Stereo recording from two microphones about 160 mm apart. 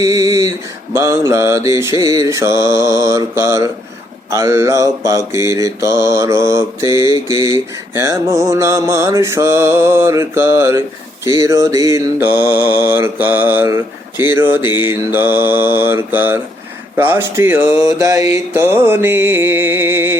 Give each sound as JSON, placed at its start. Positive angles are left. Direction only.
{"t": 0.0, "sound": "mantra", "side_deg": -20}